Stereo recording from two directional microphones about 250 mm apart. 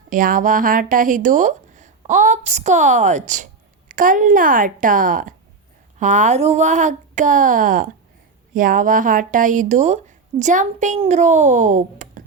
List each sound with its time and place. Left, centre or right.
0.1 s a woman's voice: right